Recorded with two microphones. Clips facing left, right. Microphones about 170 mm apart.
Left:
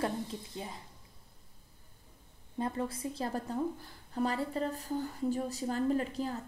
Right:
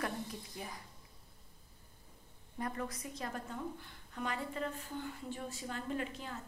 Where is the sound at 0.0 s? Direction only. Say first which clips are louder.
Left 5 dB; 25° left (ahead or behind).